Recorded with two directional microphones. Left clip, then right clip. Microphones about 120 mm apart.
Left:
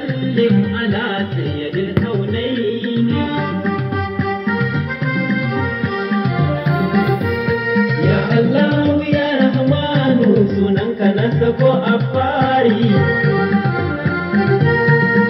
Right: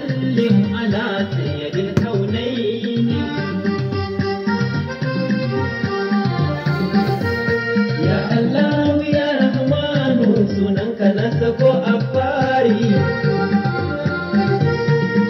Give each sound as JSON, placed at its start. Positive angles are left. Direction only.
{"t": 0.4, "sound": "music", "side_deg": 30}
{"t": 7.7, "sound": "music", "side_deg": 50}